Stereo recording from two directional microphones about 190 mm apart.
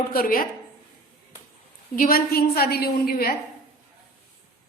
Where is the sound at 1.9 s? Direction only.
50° left (ahead or behind).